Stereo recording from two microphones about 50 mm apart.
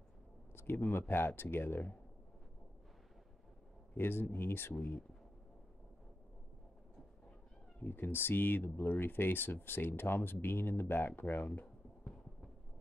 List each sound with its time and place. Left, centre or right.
0.6 s speech: left
3.9 s speech: left
7.8 s speech: left